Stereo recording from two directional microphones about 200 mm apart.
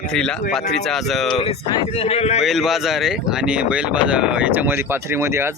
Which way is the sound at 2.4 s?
Centre (ahead or behind).